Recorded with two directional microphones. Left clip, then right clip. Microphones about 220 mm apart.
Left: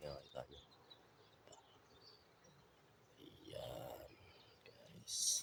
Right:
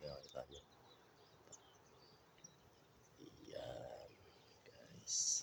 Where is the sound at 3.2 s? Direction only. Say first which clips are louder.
Even; centre (ahead or behind).